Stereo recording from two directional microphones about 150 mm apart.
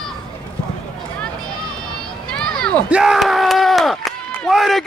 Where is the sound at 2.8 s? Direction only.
5° right (ahead or behind).